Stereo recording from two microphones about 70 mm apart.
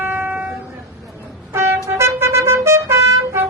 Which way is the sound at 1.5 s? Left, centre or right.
Right.